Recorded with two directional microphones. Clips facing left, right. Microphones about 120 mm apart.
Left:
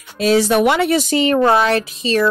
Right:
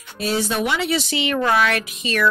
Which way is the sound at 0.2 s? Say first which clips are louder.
Left 8 dB; 90° left.